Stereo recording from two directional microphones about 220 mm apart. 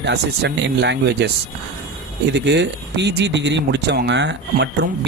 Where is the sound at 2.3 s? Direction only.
50° right (ahead or behind).